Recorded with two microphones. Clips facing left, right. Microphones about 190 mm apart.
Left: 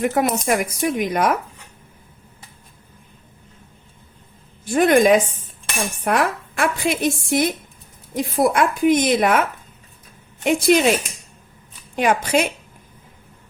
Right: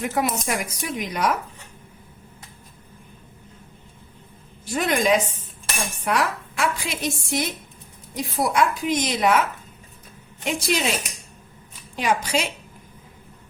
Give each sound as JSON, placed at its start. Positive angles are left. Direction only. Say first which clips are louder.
{"t": 0.0, "sound": "a woman's voice", "louder": "left 5 dB", "side_deg": 50}
{"t": 4.6, "sound": "a woman's voice", "louder": "left 8 dB", "side_deg": 50}
{"t": 11.9, "sound": "a woman's voice", "louder": "left 5 dB", "side_deg": 55}